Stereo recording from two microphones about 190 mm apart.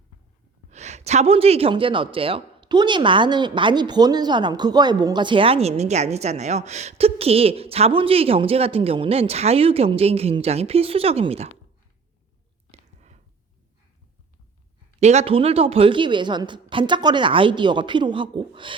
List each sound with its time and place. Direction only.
0.7 s speech: 35° right (ahead or behind)
15.0 s a woman's voice: 35° right (ahead or behind)